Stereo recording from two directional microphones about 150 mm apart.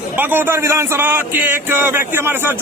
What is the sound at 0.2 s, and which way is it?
Speech, 15° right (ahead or behind).